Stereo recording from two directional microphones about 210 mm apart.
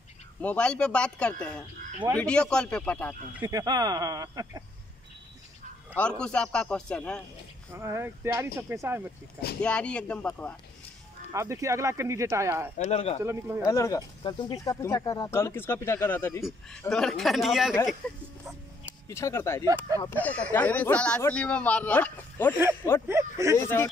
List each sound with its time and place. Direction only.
0.4 s a man's voice: 5° left (ahead or behind)
1.8 s speech: 40° right (ahead or behind)
2.1 s a man's voice: 5° left (ahead or behind)
3.4 s speech: 20° right (ahead or behind)
5.9 s a man's voice: 5° left (ahead or behind)
7.7 s speech: 10° right (ahead or behind)
9.6 s a man's voice: 5° left (ahead or behind)
11.3 s speech: 15° right (ahead or behind)
12.7 s speech: 30° left (ahead or behind)
13.2 s speech: 15° right (ahead or behind)
13.6 s a man's voice: 15° left (ahead or behind)
23.0 s speech: 15° right (ahead or behind)
23.6 s speech: 10° left (ahead or behind)